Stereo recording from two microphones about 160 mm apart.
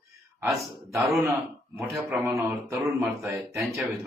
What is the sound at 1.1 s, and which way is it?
Speech, centre (ahead or behind).